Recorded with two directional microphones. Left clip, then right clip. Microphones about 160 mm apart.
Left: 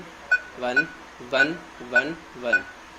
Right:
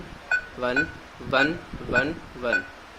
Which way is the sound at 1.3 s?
45° right (ahead or behind).